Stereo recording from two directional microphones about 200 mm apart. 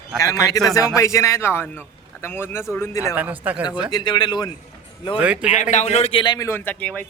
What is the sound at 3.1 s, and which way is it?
Speech, 10° right (ahead or behind).